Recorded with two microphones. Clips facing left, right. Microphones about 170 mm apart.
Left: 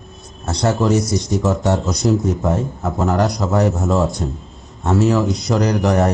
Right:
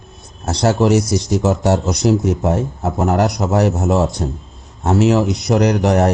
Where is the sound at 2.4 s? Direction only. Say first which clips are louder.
Right 2 dB; 20° right (ahead or behind).